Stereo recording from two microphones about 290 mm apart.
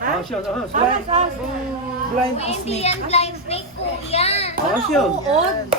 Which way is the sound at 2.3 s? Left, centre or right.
Left.